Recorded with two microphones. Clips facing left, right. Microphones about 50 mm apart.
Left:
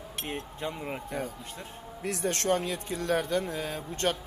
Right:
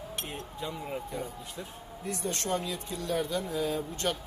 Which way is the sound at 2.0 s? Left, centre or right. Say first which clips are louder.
Left 4 dB; left.